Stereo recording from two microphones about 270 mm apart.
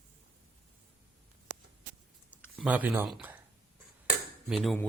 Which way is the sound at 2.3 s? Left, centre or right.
Centre.